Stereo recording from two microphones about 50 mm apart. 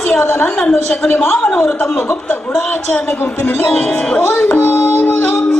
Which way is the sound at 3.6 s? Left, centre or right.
Left.